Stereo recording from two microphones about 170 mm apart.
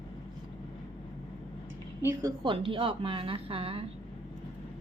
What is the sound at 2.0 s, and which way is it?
A woman's voice, 25° right (ahead or behind).